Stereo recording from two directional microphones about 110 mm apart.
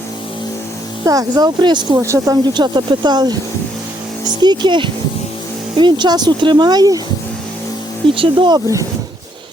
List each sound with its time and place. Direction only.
1.0 s speech: 30° right (ahead or behind)
2.0 s speech: 25° right (ahead or behind)
2.4 s speech: 40° right (ahead or behind)
8.0 s speech: 50° right (ahead or behind)